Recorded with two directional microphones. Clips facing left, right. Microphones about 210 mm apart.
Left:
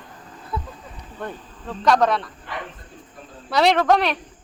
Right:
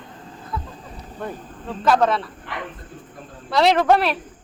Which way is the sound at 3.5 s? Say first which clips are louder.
Right 1 dB; centre (ahead or behind).